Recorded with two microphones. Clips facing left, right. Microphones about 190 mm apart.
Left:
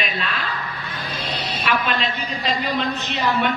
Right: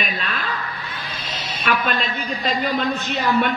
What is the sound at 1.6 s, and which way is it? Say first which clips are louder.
Speech: right 1 dB; 50° right (ahead or behind).